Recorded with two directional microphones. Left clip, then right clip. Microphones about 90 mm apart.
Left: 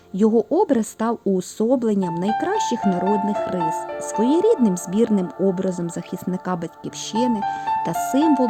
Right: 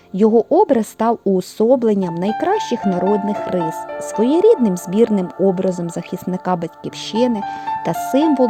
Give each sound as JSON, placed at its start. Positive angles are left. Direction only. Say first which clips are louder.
{"t": 0.2, "sound": "speech", "louder": "right 5 dB", "side_deg": -30}
{"t": 3.0, "sound": "speech", "louder": "right 5 dB", "side_deg": 0}
{"t": 4.2, "sound": "speech", "louder": "right 5 dB", "side_deg": -40}
{"t": 7.1, "sound": "speech", "louder": "right 3 dB", "side_deg": -45}